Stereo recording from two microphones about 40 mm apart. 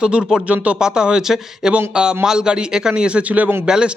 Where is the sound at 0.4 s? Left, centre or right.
Right.